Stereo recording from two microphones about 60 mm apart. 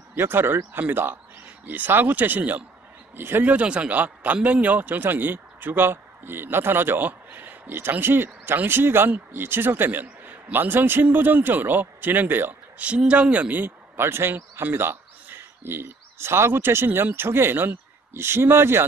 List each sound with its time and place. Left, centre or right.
0.1 s a man's voice: right
3.5 s a man's voice: centre
12.8 s a woman's voice: right
14.0 s a man's voice: right